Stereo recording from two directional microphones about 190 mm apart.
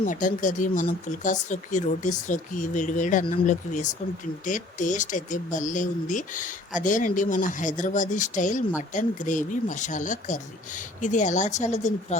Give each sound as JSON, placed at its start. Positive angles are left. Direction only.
{"t": 0.0, "sound": "speech", "side_deg": 45}